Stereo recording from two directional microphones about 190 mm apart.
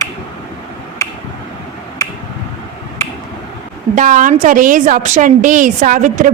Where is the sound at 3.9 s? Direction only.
45° right (ahead or behind).